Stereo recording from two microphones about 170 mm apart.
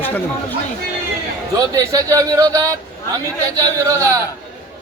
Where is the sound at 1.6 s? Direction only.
20° right (ahead or behind).